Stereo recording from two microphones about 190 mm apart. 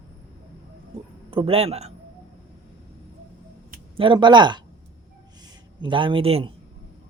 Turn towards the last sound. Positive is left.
turn(degrees=-30)  # may be behind; listen again after turning